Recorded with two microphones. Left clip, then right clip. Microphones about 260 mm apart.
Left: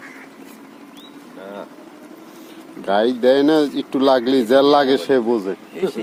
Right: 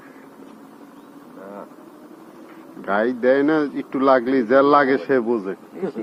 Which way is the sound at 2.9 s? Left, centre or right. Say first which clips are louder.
Left 3 dB; centre.